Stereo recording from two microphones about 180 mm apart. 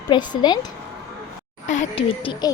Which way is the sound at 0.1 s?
25° left (ahead or behind).